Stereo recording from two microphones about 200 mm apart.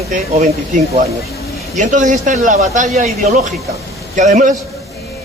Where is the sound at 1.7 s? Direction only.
40° right (ahead or behind).